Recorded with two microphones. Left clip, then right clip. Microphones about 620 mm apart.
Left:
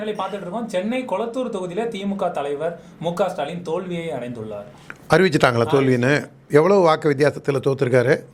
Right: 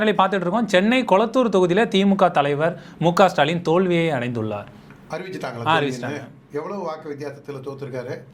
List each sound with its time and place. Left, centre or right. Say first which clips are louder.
0.0 s speech: right 8 dB; right
5.0 s a man's voice: left 14 dB; left